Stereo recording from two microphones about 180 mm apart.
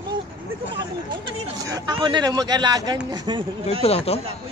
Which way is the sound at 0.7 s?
20° right (ahead or behind).